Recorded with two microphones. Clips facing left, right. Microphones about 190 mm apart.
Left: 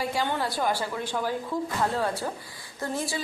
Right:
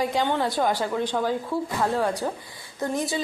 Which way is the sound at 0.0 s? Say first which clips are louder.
Right 4 dB; 20° right (ahead or behind).